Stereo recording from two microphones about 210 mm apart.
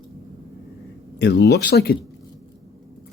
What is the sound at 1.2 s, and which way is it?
Speech, 55° left (ahead or behind).